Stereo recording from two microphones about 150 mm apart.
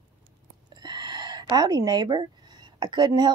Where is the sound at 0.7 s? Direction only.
30° right (ahead or behind).